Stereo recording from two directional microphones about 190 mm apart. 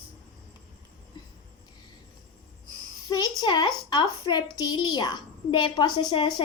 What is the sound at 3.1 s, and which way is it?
A woman's voice, 20° left (ahead or behind).